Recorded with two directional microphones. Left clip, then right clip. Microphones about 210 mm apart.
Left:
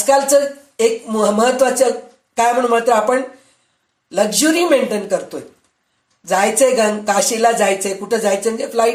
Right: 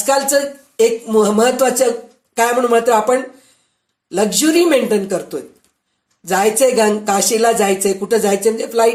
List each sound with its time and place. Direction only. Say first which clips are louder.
0.0 s speech: left 2 dB; 35° right (ahead or behind)